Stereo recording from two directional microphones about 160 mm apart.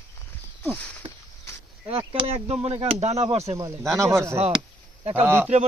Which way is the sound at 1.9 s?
35° right (ahead or behind).